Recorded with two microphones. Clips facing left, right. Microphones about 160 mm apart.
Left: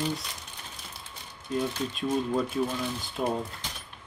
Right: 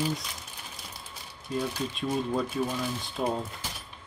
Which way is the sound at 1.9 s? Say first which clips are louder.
Left 1 dB; centre (ahead or behind).